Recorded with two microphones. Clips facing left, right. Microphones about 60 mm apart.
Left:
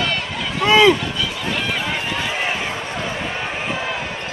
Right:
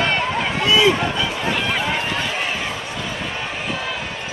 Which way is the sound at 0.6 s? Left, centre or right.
Left.